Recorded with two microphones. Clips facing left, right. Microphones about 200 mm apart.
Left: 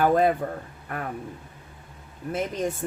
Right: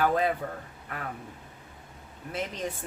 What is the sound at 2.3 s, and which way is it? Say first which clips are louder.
Speech: left 6 dB; 50° left (ahead or behind).